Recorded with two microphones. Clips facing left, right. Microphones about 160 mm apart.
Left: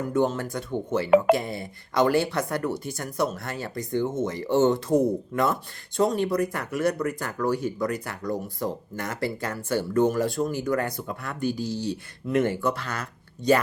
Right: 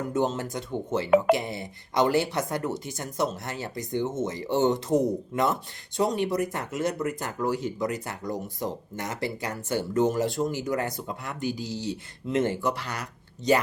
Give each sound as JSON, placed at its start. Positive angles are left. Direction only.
{"t": 0.1, "sound": "speech", "side_deg": -20}